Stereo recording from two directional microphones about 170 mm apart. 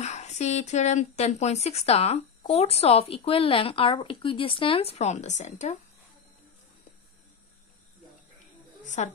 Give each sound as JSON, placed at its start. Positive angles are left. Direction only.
{"t": 0.0, "sound": "speech", "side_deg": 40}
{"t": 8.8, "sound": "a woman's voice", "side_deg": 45}